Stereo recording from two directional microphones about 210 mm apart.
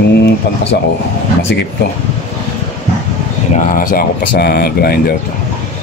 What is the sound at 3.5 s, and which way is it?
Speech, 40° left (ahead or behind).